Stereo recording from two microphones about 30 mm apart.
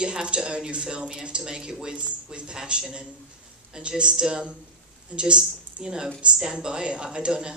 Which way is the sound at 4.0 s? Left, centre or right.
Right.